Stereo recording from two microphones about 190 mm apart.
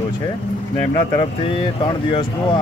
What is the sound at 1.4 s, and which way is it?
Speech, 30° left (ahead or behind).